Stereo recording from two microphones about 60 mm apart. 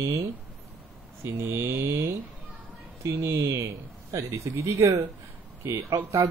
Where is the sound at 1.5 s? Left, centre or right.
Right.